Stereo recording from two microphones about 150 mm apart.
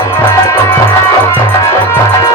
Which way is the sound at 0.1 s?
15° left (ahead or behind).